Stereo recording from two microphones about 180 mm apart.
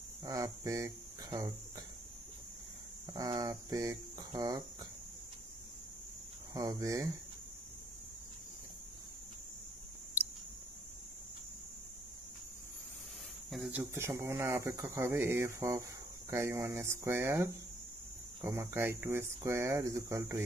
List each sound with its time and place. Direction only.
0.2 s cricket: 20° right (ahead or behind)
3.1 s cricket: 20° right (ahead or behind)
6.5 s cricket: 20° right (ahead or behind)
13.5 s speech: 5° right (ahead or behind)